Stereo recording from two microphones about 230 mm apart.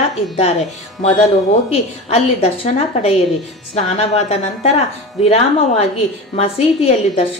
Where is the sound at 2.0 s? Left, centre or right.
Left.